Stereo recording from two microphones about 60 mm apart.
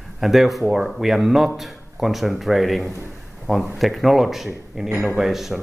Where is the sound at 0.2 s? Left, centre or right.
Centre.